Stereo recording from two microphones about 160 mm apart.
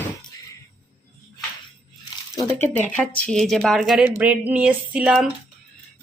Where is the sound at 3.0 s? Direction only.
5° left (ahead or behind).